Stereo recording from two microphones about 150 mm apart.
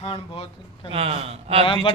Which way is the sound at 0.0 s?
40° left (ahead or behind).